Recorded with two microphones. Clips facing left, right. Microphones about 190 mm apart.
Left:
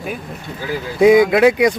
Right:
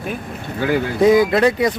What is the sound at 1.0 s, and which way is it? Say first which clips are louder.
Speech: left 3 dB; 10° left (ahead or behind).